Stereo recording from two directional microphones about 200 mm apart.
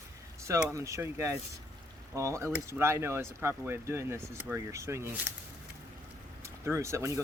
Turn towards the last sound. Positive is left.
turn(degrees=-15)  # may be behind; listen again after turning